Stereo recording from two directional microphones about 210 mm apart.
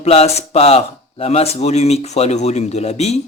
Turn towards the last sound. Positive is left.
turn(degrees=30)  # may be behind; listen again after turning